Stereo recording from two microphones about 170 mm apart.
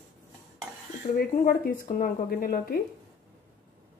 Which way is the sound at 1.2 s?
60° left (ahead or behind).